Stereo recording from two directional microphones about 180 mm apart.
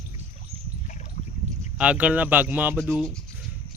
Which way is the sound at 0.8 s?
45° left (ahead or behind).